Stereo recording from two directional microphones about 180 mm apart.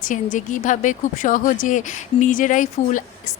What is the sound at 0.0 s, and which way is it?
A woman's voice, 45° left (ahead or behind).